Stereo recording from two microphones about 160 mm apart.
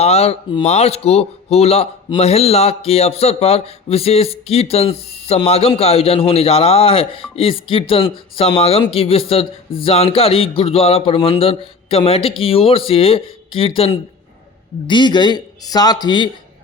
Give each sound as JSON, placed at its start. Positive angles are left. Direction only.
{"t": 0.0, "sound": "a man's voice", "side_deg": 40}